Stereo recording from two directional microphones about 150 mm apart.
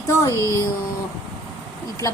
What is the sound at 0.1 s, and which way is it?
Speech, 20° left (ahead or behind).